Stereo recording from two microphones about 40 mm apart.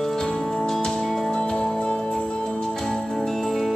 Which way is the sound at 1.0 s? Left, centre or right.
Centre.